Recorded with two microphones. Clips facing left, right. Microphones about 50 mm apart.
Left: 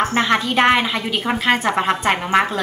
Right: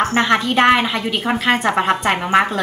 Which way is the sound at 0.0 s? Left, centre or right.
Centre.